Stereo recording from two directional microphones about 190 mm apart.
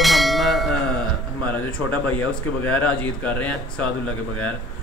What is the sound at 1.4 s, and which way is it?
A man's voice, 10° left (ahead or behind).